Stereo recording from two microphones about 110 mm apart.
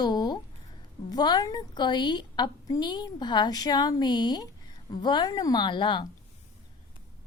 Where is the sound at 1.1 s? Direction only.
40° left (ahead or behind).